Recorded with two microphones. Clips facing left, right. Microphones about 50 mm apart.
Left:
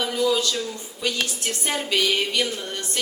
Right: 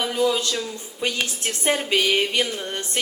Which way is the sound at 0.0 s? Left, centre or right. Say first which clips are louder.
Even; right.